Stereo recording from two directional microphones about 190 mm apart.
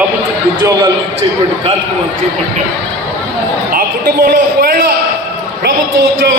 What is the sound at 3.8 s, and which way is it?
A man's voice, 50° right (ahead or behind).